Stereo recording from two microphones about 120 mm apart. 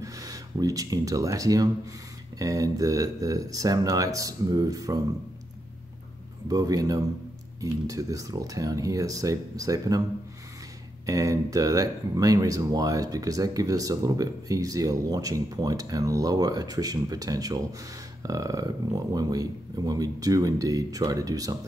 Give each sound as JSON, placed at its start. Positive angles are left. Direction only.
{"t": 0.0, "sound": "speech", "side_deg": -30}
{"t": 6.5, "sound": "speech", "side_deg": -30}
{"t": 11.1, "sound": "speech", "side_deg": -30}